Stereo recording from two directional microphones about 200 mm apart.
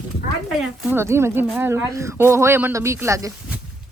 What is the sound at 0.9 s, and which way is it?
Speech, 15° right (ahead or behind).